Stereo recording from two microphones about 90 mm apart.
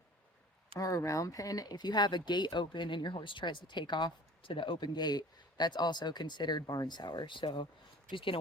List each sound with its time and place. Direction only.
0.8 s speech: 40° left (ahead or behind); by 8.4 s 75° left (ahead or behind)